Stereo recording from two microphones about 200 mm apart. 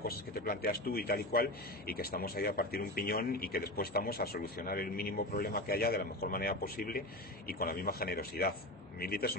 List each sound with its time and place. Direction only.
0.0 s a man's voice: 50° left (ahead or behind)